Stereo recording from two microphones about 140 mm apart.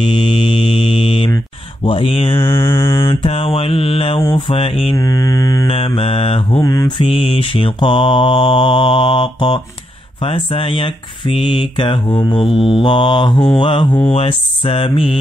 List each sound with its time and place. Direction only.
0.0 s mantra: 40° left (ahead or behind)
1.9 s speech: 40° left (ahead or behind)
2.3 s mantra: 20° left (ahead or behind)
3.2 s speech: 40° left (ahead or behind)
4.9 s mantra: 25° left (ahead or behind)
5.7 s speech: 45° left (ahead or behind)
6.6 s mantra: 25° left (ahead or behind)
7.1 s speech: 40° left (ahead or behind)